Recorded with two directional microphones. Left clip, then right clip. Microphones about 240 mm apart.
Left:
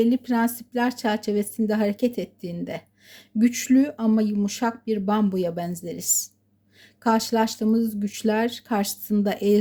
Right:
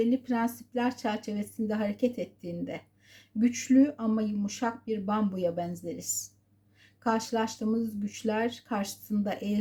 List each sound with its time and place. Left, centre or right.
0.0 s speech: left